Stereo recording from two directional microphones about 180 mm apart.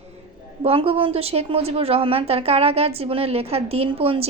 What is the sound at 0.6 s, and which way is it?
A woman's voice, 30° right (ahead or behind).